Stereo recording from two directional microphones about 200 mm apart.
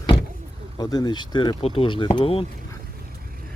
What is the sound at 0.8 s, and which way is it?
Speech, 20° left (ahead or behind).